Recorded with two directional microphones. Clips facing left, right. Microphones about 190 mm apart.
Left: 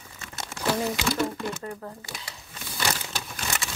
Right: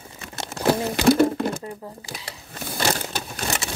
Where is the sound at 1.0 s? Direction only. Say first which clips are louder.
Right 10 dB; 55° right (ahead or behind).